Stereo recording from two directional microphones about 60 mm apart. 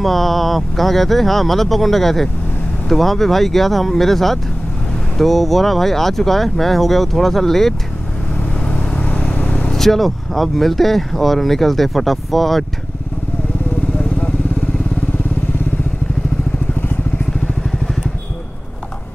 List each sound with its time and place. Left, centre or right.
0.0 s speech: centre
8.6 s vehicle: centre
9.7 s speech: centre